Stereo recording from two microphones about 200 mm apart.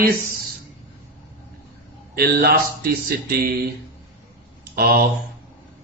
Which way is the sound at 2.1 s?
50° right (ahead or behind).